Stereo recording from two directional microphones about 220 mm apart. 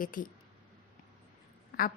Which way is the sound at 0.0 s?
40° left (ahead or behind).